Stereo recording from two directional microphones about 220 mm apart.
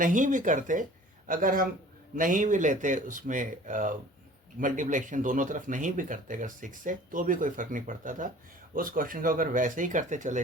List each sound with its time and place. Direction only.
0.0 s speech: 35° right (ahead or behind)